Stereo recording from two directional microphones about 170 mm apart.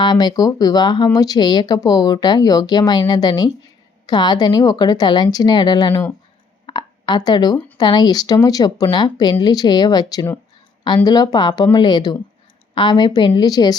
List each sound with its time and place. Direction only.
0.0 s speech: 25° left (ahead or behind)